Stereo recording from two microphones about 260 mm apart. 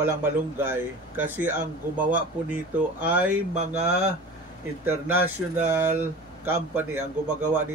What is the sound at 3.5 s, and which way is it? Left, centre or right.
Speech, right.